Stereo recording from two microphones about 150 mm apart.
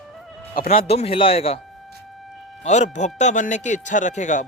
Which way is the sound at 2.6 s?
50° left (ahead or behind).